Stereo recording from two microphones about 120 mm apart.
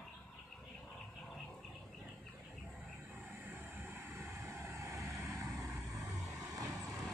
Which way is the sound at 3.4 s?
15° right (ahead or behind).